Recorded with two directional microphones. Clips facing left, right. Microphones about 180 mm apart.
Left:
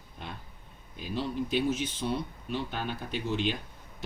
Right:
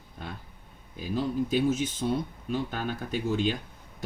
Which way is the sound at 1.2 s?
45° right (ahead or behind).